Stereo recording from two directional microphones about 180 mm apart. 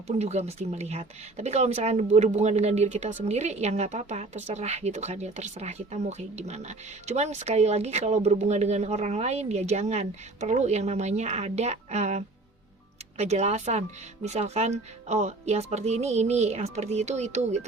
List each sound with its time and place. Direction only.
0.2 s a woman's voice: 35° right (ahead or behind)